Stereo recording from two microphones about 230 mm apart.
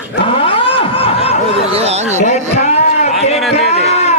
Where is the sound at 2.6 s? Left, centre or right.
Left.